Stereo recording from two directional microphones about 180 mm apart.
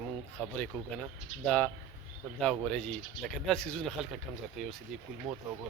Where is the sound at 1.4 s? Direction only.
5° left (ahead or behind).